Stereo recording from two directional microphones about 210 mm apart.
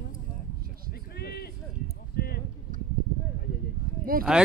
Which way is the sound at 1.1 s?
50° left (ahead or behind).